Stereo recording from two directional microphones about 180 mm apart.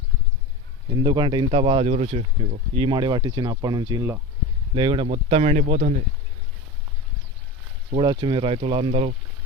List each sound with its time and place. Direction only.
0.9 s speech: 25° right (ahead or behind); by 6.0 s 40° right (ahead or behind)
7.9 s speech: 25° right (ahead or behind)